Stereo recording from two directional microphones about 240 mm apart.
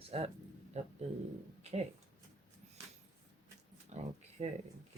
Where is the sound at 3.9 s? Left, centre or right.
Right.